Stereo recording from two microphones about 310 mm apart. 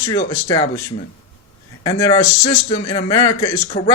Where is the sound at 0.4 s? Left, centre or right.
Centre.